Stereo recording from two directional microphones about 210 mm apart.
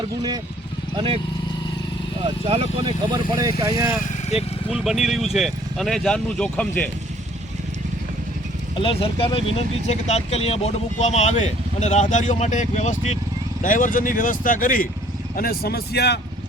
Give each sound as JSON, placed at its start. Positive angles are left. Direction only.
{"t": 0.9, "sound": "speech", "side_deg": -25}
{"t": 2.2, "sound": "speech", "side_deg": -25}
{"t": 4.4, "sound": "speech", "side_deg": -5}
{"t": 8.7, "sound": "speech", "side_deg": 25}